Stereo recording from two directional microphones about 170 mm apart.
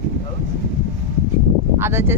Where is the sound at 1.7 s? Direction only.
15° right (ahead or behind).